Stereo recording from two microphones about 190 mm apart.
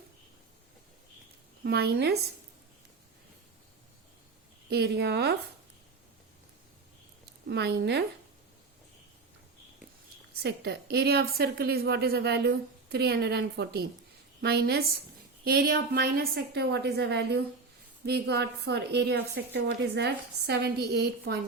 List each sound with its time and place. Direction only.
1.6 s a woman's voice: 55° right (ahead or behind)
4.7 s a woman's voice: 60° right (ahead or behind)
7.4 s a woman's voice: 60° right (ahead or behind)
10.3 s a woman's voice: 60° right (ahead or behind)